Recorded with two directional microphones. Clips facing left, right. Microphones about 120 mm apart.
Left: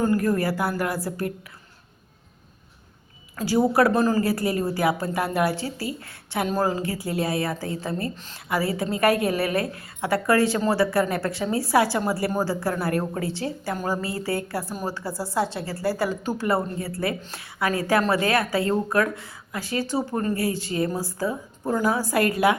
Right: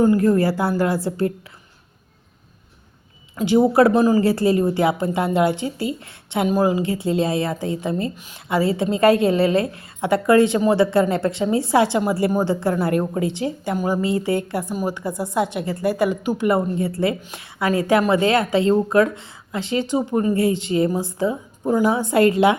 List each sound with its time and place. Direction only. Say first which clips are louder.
0.0 s a woman's voice: right 6 dB; 20° right (ahead or behind)
3.3 s a woman's voice: right 5 dB; 20° right (ahead or behind)